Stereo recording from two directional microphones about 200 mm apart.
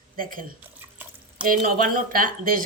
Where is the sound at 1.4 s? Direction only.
45° right (ahead or behind).